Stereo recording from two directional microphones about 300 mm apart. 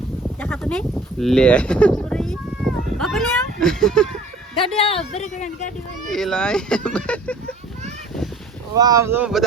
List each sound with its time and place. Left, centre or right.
0.3 s a sound: centre
4.8 s speech: centre
6.1 s speech: centre
8.7 s speech: centre